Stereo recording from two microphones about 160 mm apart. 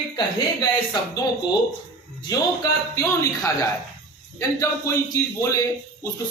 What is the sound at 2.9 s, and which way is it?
A man's voice, 20° left (ahead or behind).